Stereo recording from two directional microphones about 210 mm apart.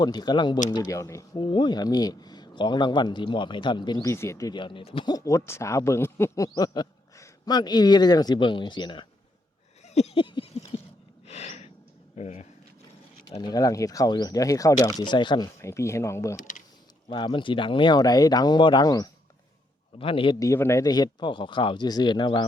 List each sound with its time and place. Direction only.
0.0 s speech: 20° left (ahead or behind)
9.8 s a sound: 30° left (ahead or behind)
11.3 s gasp: 30° left (ahead or behind)
12.1 s speech: 30° left (ahead or behind)
13.3 s speech: 20° left (ahead or behind)
16.4 s speech: 40° left (ahead or behind)
17.1 s speech: 20° left (ahead or behind)